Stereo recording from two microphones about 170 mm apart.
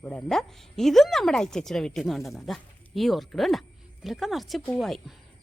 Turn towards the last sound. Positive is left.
turn(degrees=0)  # may be behind; listen again after turning